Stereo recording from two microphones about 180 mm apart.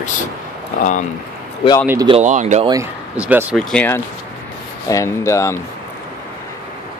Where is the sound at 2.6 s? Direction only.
20° right (ahead or behind).